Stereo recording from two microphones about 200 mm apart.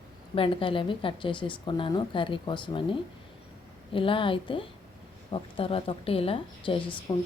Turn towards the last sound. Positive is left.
turn(degrees=20)  # may be behind; listen again after turning